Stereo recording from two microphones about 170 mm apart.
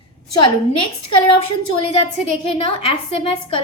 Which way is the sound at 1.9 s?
35° left (ahead or behind).